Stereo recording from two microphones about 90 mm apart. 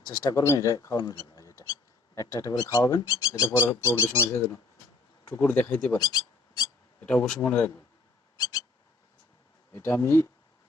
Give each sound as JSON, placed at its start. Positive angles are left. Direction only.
{"t": 0.0, "sound": "speech", "side_deg": 45}
{"t": 5.3, "sound": "speech", "side_deg": 20}
{"t": 6.0, "sound": "a sound", "side_deg": 45}
{"t": 7.0, "sound": "speech", "side_deg": 15}
{"t": 8.4, "sound": "a sound", "side_deg": 45}
{"t": 9.7, "sound": "speech", "side_deg": 30}